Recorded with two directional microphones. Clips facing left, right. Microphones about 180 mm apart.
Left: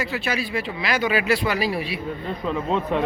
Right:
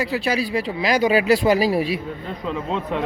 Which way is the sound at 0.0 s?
35° right (ahead or behind).